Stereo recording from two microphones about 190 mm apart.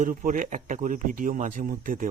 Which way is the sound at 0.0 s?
45° right (ahead or behind).